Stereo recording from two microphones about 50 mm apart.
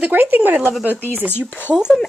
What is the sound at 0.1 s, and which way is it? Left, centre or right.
Speech, right.